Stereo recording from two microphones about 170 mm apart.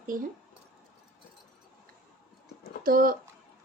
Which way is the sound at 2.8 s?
55° right (ahead or behind).